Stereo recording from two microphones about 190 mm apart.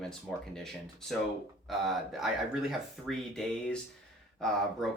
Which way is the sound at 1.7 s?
Centre (ahead or behind).